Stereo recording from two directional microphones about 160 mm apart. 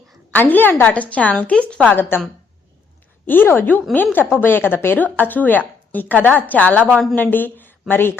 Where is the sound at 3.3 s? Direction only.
10° left (ahead or behind).